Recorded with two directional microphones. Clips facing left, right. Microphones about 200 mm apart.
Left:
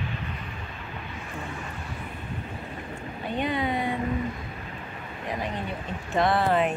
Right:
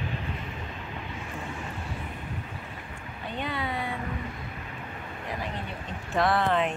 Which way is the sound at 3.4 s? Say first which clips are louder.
Left 5 dB; 20° left (ahead or behind).